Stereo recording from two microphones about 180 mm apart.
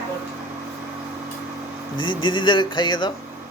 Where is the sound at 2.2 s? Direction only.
25° left (ahead or behind).